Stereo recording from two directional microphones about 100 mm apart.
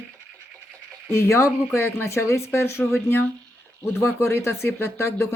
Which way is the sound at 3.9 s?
25° left (ahead or behind).